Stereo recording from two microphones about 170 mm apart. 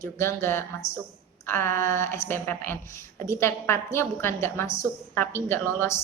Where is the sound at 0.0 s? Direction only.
15° left (ahead or behind).